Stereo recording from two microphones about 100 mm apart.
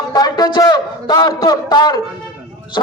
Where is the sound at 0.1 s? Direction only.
40° left (ahead or behind).